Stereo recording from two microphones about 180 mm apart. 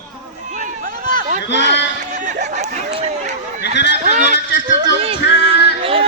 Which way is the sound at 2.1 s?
45° right (ahead or behind).